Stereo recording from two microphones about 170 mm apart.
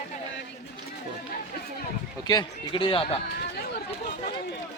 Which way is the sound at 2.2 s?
25° left (ahead or behind).